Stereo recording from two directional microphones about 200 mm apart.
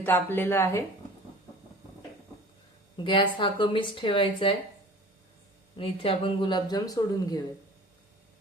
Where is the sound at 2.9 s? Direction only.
25° left (ahead or behind).